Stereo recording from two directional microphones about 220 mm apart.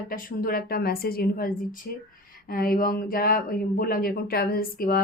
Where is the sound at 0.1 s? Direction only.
40° left (ahead or behind).